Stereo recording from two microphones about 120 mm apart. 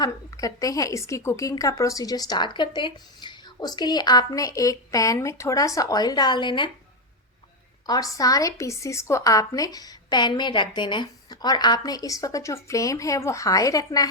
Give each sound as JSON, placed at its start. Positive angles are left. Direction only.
{"t": 0.0, "sound": "a woman's voice", "side_deg": 30}
{"t": 7.9, "sound": "a woman's voice", "side_deg": 30}